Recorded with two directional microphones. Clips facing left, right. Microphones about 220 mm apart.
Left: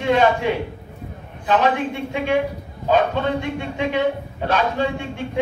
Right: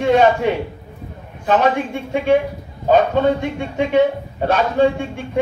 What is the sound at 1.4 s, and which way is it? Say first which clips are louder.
A man's voice: right 2 dB; 45° right (ahead or behind).